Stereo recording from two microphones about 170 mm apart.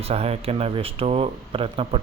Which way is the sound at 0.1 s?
35° right (ahead or behind).